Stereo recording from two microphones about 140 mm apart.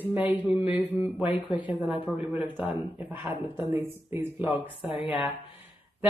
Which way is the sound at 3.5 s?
15° right (ahead or behind).